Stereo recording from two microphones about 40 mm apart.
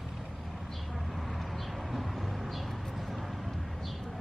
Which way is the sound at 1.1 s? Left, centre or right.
Centre.